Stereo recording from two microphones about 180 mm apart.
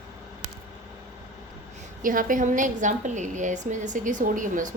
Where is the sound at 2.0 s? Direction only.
50° right (ahead or behind).